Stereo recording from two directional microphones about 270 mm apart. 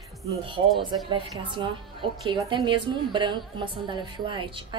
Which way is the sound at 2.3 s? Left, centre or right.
Centre.